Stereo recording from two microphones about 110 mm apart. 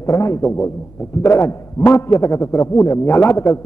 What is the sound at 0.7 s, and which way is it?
A man's voice, 25° left (ahead or behind).